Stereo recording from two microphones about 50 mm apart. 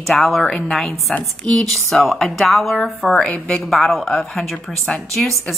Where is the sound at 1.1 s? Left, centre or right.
Left.